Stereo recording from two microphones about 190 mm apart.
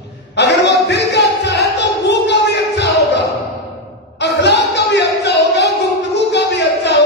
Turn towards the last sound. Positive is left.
turn(degrees=65)  # may be behind; listen again after turning